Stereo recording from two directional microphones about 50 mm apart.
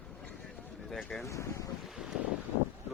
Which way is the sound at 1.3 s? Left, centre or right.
Left.